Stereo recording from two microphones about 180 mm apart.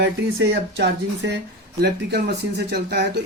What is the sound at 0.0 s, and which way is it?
Speech, 75° right (ahead or behind).